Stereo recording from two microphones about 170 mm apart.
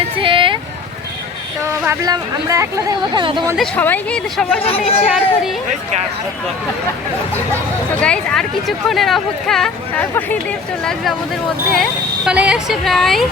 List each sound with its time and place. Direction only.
0.2 s a sound: 30° right (ahead or behind)
1.8 s speech: 15° right (ahead or behind)
3.6 s speech: 10° left (ahead or behind)
5.0 s speech: 5° right (ahead or behind)
8.0 s speech: 5° left (ahead or behind)
11.7 s speech: centre (ahead or behind)